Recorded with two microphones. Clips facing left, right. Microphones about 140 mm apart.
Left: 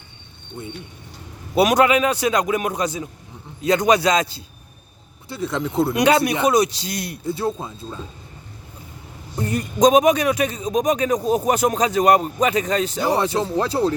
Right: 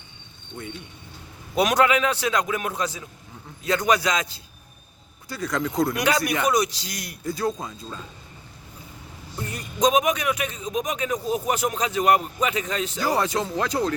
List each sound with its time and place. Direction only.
1.5 s a man's voice: 10° left (ahead or behind)
4.0 s a man's voice: 35° left (ahead or behind)
9.4 s a man's voice: 45° left (ahead or behind)
13.0 s a man's voice: 25° left (ahead or behind)